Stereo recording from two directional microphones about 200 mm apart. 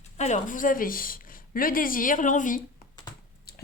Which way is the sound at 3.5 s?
50° left (ahead or behind).